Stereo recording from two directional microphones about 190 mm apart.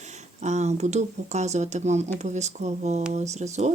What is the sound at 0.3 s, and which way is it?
Speech, 35° right (ahead or behind).